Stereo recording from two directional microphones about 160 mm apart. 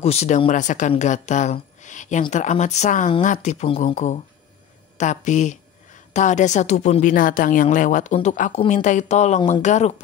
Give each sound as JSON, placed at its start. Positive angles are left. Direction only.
{"t": 0.0, "sound": "a woman's voice", "side_deg": 40}